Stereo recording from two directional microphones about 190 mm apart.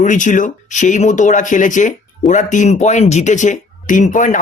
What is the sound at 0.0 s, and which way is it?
Speech, 40° left (ahead or behind).